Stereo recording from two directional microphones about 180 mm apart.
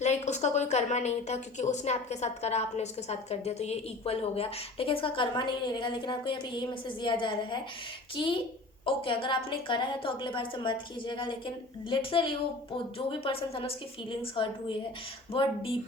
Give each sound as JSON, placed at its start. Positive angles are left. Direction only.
{"t": 0.0, "sound": "a woman's voice", "side_deg": 40}